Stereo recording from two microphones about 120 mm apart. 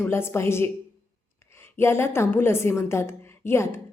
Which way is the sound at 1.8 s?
20° left (ahead or behind).